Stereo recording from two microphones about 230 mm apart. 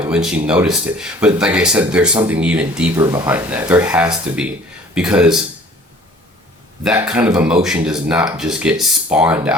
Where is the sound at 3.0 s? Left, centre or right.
Centre.